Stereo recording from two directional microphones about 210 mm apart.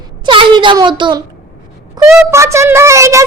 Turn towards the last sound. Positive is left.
turn(degrees=-15)  # may be behind; listen again after turning